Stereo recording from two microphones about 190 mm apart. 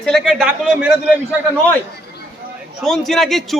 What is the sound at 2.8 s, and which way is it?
Speech, centre (ahead or behind).